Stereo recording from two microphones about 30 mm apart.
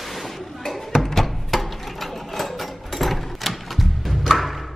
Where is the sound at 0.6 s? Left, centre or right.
Centre.